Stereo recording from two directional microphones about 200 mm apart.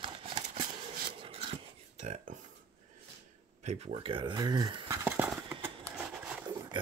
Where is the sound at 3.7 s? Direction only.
30° right (ahead or behind).